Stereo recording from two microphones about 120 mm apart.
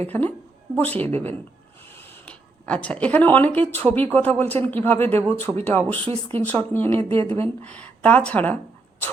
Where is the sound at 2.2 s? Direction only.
10° left (ahead or behind).